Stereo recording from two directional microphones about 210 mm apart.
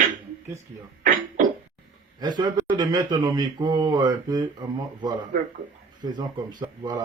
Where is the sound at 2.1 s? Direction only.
20° right (ahead or behind).